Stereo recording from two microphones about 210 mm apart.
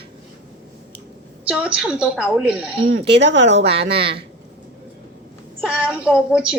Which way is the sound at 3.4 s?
30° right (ahead or behind).